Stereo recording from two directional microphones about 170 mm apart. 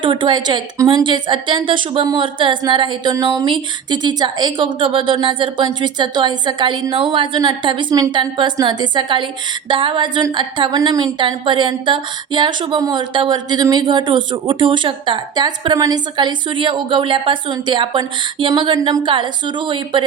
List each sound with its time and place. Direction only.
0.0 s a woman's voice: 30° right (ahead or behind)